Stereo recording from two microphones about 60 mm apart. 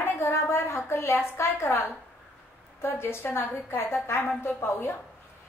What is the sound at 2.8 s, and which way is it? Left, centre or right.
A woman's voice, left.